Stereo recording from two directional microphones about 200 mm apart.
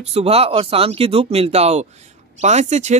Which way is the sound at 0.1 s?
30° right (ahead or behind).